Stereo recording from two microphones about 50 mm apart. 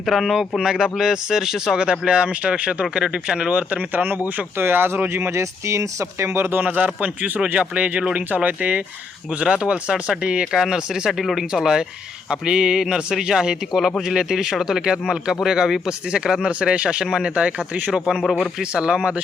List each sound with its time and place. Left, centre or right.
0.0 s speech: centre
3.5 s speech: right
3.9 s a man's voice: right
5.4 s speech: right
6.6 s a man's voice: right
9.4 s speech: centre
11.2 s speech: centre
18.2 s speech: centre
18.6 s speech: centre